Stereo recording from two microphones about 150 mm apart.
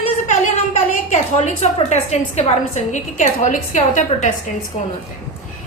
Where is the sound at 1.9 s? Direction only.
50° left (ahead or behind).